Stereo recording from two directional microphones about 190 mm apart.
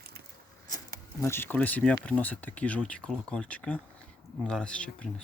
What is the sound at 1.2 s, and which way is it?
Speech, 10° left (ahead or behind).